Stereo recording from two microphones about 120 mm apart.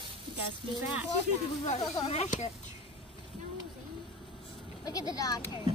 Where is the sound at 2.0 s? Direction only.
60° left (ahead or behind); by 2.5 s 75° left (ahead or behind).